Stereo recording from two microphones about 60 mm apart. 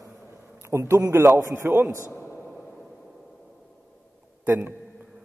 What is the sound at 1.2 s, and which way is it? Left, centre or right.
Speech, right.